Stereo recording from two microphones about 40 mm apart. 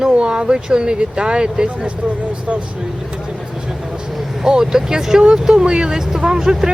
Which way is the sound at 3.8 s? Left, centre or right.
Right.